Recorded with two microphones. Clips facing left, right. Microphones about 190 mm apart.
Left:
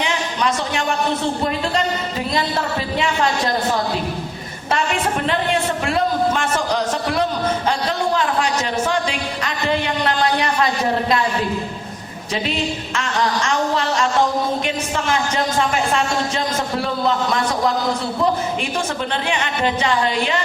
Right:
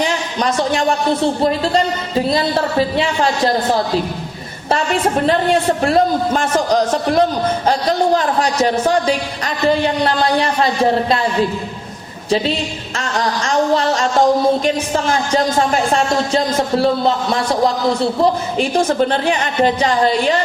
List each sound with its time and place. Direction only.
0.0 s a sound: 40° right (ahead or behind)
1.4 s a woman's voice: 35° right (ahead or behind)
5.2 s a woman's voice: 40° right (ahead or behind)
13.0 s music: 35° right (ahead or behind)
14.6 s a woman's voice: 35° right (ahead or behind)
18.6 s a woman's voice: 40° right (ahead or behind)